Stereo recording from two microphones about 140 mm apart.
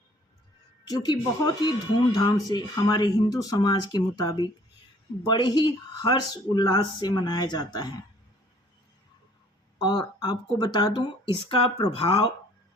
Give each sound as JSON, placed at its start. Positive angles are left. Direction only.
{"t": 0.9, "sound": "speech", "side_deg": 30}
{"t": 9.8, "sound": "speech", "side_deg": 30}